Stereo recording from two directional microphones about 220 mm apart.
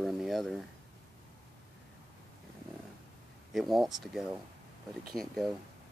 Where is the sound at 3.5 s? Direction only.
Centre (ahead or behind).